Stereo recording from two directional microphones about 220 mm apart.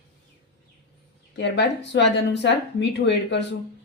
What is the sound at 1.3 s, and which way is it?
Speech, 50° left (ahead or behind).